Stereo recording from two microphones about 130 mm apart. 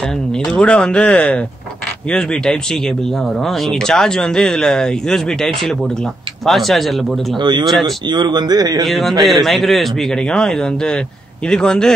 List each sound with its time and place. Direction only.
0.5 s speech: 10° left (ahead or behind)
7.3 s speech: 35° right (ahead or behind)
8.8 s speech: centre (ahead or behind)